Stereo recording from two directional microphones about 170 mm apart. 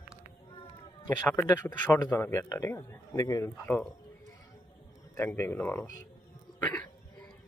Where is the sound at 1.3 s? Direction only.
15° left (ahead or behind).